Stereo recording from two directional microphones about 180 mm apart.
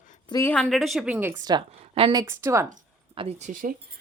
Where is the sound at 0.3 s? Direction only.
20° left (ahead or behind).